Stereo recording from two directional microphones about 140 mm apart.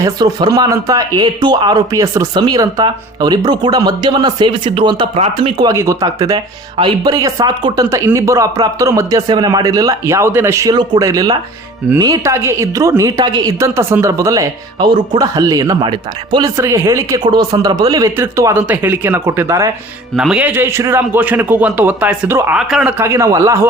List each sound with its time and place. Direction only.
0.0 s speech: 30° right (ahead or behind)
5.6 s speech: 20° right (ahead or behind)
16.6 s a man's voice: 20° right (ahead or behind)
20.1 s a man's voice: 5° right (ahead or behind); by 23.6 s 20° right (ahead or behind)